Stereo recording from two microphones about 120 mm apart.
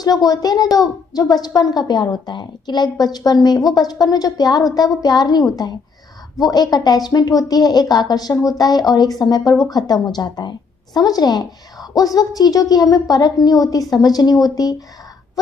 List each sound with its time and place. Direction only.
0.0 s a woman's voice: 30° left (ahead or behind)